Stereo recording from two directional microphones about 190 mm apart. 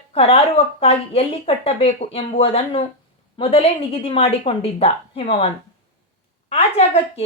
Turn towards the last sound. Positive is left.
turn(degrees=30)  # may be behind; listen again after turning